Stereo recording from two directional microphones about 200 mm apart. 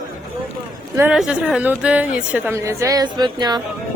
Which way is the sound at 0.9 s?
5° right (ahead or behind).